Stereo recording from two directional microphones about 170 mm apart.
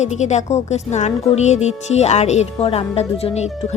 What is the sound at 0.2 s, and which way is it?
A woman's voice, 45° left (ahead or behind).